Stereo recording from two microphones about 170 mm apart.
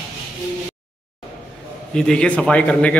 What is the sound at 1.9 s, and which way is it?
A man's voice, 5° left (ahead or behind).